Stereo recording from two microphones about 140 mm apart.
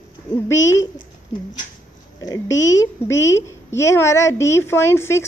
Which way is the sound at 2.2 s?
25° left (ahead or behind).